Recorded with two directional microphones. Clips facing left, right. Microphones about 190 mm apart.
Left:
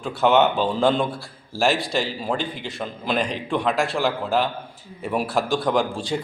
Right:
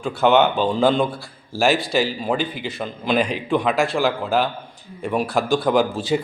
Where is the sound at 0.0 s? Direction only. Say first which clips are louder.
Right 2 dB; centre (ahead or behind).